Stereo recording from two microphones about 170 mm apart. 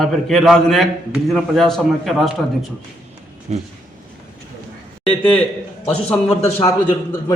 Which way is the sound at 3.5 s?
40° right (ahead or behind).